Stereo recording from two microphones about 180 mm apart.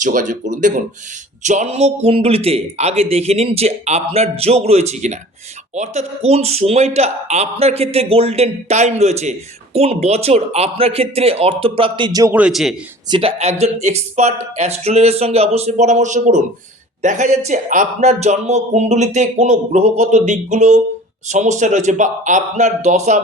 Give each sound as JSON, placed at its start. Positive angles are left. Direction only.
{"t": 0.0, "sound": "speech", "side_deg": -45}
{"t": 12.4, "sound": "a man's voice", "side_deg": 0}
{"t": 13.1, "sound": "speech", "side_deg": -30}